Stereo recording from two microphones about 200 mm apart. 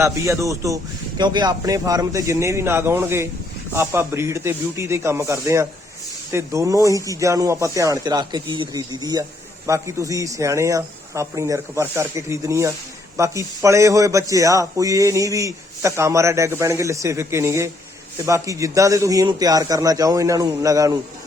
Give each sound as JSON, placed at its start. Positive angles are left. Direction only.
{"t": 0.0, "sound": "speech", "side_deg": -15}